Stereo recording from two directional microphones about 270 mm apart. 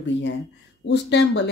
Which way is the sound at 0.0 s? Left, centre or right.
Left.